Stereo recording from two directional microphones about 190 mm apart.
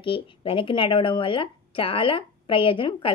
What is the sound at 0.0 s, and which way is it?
Speech, 25° left (ahead or behind).